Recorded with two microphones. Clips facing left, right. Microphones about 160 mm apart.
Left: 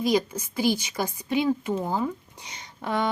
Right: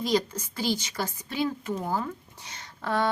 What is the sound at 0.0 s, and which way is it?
A woman's voice, 10° left (ahead or behind).